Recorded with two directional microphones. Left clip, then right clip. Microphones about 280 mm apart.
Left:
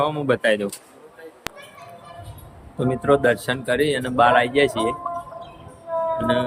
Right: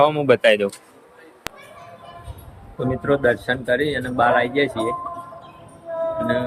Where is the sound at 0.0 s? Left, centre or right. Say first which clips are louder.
Right 5 dB; centre.